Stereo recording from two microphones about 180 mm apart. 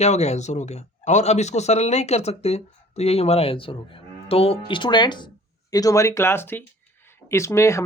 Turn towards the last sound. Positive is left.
turn(degrees=15)  # may be behind; listen again after turning